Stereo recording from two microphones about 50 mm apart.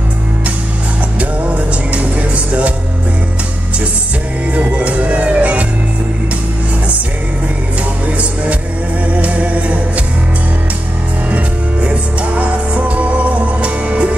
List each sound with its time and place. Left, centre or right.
1.2 s music: right
4.6 s music: right
9.0 s music: right
11.2 s music: right